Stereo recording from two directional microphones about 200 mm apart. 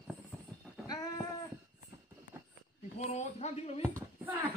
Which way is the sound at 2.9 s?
35° left (ahead or behind).